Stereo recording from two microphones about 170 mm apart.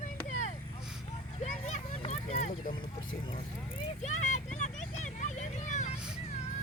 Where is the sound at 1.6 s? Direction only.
40° left (ahead or behind).